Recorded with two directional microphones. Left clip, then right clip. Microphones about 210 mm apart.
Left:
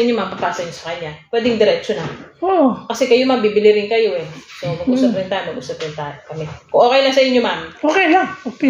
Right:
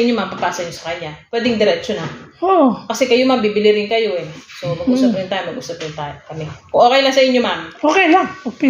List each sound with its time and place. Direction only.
0.1 s a woman's voice: 20° right (ahead or behind)